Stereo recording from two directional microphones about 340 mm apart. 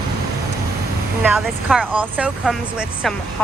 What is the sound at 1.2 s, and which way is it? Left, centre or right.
Speech, centre.